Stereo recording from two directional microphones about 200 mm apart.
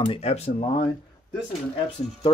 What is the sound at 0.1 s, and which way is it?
Speech, 30° left (ahead or behind).